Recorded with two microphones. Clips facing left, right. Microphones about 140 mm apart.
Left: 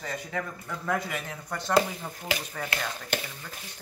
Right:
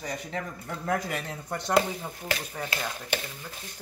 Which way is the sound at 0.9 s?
40° right (ahead or behind).